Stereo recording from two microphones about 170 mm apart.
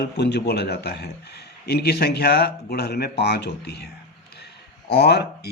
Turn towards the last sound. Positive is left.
turn(degrees=75)  # may be behind; listen again after turning